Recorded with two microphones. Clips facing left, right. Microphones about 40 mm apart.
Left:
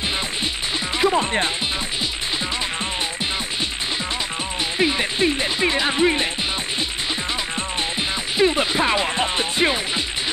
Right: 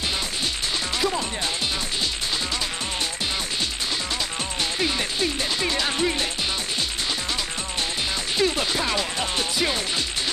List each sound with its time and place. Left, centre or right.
0.9 s music: left
4.7 s speech: left
8.4 s speech: left